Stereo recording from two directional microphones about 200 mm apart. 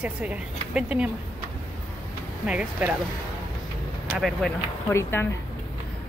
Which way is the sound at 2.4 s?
5° right (ahead or behind).